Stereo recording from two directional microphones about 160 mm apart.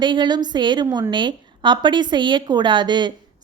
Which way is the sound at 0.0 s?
30° right (ahead or behind).